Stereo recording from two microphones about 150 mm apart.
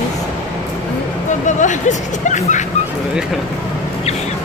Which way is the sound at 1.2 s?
55° left (ahead or behind).